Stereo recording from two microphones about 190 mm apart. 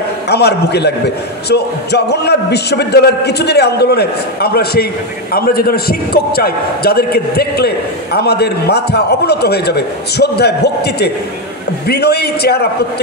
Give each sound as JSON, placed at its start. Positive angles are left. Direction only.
{"t": 0.3, "sound": "a man's voice", "side_deg": 60}